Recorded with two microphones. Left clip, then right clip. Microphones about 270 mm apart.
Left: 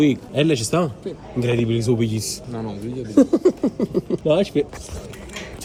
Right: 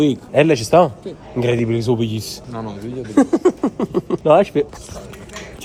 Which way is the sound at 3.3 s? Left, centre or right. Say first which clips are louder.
Right 2 dB; centre.